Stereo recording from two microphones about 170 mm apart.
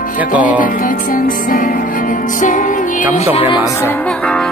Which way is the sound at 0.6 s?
55° left (ahead or behind).